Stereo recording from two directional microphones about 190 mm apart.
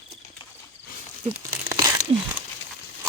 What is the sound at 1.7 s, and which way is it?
Crumpling, 15° right (ahead or behind).